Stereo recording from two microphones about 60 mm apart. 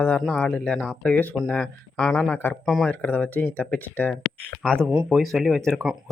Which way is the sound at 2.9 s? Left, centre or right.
Left.